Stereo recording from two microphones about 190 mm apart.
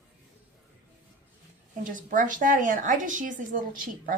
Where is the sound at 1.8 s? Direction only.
45° right (ahead or behind).